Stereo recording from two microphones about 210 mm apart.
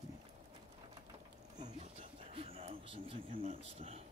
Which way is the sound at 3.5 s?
30° right (ahead or behind).